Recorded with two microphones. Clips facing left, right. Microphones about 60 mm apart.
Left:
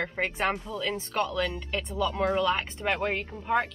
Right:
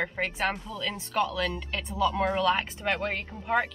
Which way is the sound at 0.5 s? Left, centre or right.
Centre.